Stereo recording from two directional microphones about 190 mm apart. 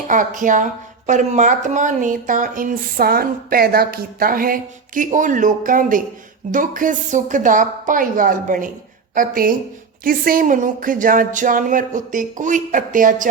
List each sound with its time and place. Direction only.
0.1 s a woman's voice: 45° right (ahead or behind)